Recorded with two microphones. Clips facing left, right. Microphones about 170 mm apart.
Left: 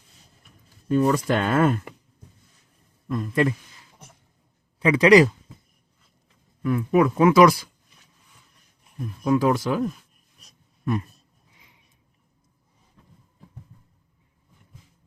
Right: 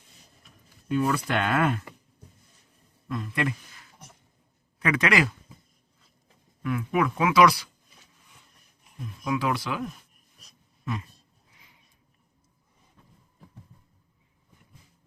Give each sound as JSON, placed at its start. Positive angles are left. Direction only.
{"t": 0.9, "sound": "speech", "side_deg": 40}
{"t": 3.1, "sound": "speech", "side_deg": 45}
{"t": 4.8, "sound": "speech", "side_deg": 30}
{"t": 6.6, "sound": "speech", "side_deg": 35}
{"t": 7.3, "sound": "speech", "side_deg": 45}
{"t": 9.2, "sound": "speech", "side_deg": 40}